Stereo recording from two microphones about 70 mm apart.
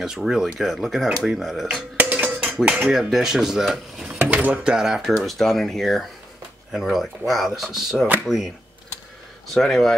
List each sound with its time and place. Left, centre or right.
0.0 s speech: centre
2.2 s cowbell: centre
2.9 s speech: centre
4.2 s mechanisms: right
4.7 s speech: centre
9.5 s speech: centre